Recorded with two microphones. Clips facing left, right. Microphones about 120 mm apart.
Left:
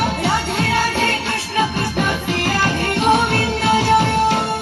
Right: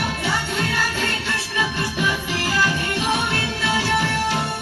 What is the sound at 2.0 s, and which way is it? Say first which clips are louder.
Music: left 4 dB; 55° left (ahead or behind).